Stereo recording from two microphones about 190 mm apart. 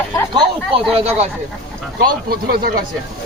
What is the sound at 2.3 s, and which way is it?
Speech, 55° right (ahead or behind).